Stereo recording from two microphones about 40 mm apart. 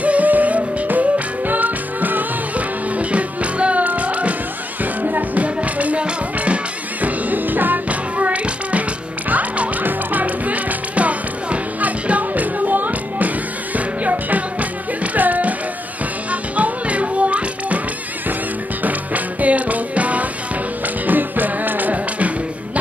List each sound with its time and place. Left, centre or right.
0.0 s music: right
3.0 s music: right
7.9 s music: right
18.8 s music: right
21.1 s music: right